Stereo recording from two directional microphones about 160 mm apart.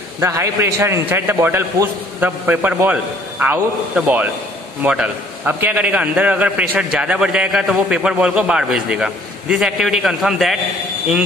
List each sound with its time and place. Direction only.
0.2 s a man's voice: 15° right (ahead or behind); by 10.6 s centre (ahead or behind)